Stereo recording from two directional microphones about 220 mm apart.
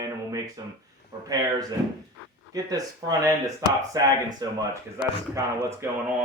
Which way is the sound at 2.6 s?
15° right (ahead or behind).